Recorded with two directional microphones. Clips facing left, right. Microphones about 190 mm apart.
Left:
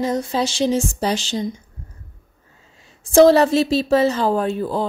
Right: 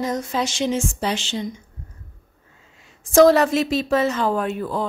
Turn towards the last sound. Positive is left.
turn(degrees=30)  # may be behind; listen again after turning